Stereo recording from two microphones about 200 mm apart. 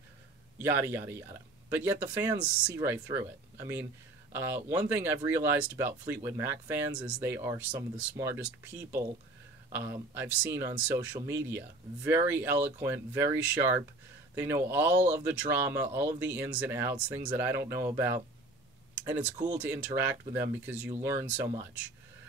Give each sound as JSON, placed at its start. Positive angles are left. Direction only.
{"t": 0.6, "sound": "speech", "side_deg": -10}
{"t": 19.6, "sound": "speech", "side_deg": -10}